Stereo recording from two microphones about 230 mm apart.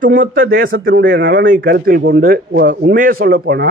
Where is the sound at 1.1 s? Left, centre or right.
Right.